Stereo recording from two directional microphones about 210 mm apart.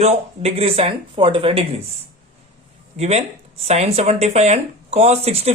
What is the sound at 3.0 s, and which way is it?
A woman's voice, 30° right (ahead or behind).